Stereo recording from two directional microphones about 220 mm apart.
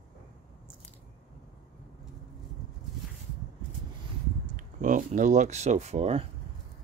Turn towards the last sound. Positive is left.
turn(degrees=-30)  # may be behind; listen again after turning